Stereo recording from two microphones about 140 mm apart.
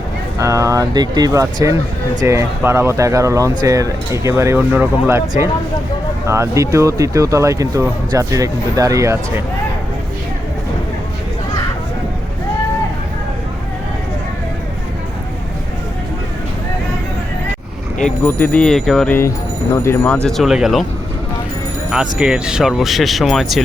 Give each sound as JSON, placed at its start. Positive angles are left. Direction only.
{"t": 0.3, "sound": "speech", "side_deg": -25}
{"t": 6.2, "sound": "speech", "side_deg": -20}
{"t": 18.3, "sound": "speech", "side_deg": 15}
{"t": 19.7, "sound": "speech", "side_deg": 20}
{"t": 20.2, "sound": "speech", "side_deg": 0}
{"t": 21.8, "sound": "speech", "side_deg": -5}